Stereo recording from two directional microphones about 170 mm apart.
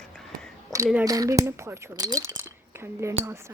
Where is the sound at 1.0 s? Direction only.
20° right (ahead or behind).